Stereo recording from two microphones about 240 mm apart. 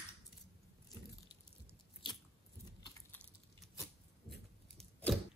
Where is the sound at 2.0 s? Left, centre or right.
Centre.